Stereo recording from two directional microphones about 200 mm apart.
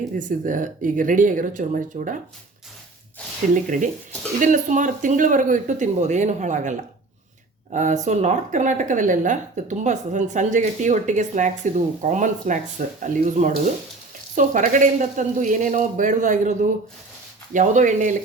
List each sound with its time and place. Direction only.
0.2 s speech: 40° right (ahead or behind)
3.5 s speech: 40° right (ahead or behind)